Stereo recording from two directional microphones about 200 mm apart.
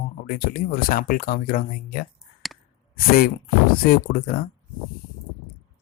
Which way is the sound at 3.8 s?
45° left (ahead or behind).